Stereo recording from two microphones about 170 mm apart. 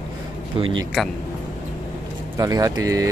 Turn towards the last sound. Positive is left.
turn(degrees=-20)  # may be behind; listen again after turning